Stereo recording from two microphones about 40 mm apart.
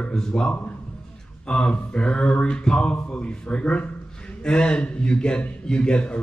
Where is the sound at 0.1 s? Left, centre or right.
Centre.